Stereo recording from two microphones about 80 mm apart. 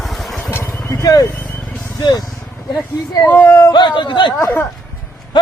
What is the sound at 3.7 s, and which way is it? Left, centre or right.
Speech, left.